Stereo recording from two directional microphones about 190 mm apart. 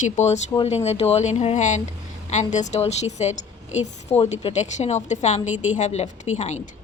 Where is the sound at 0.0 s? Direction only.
35° left (ahead or behind).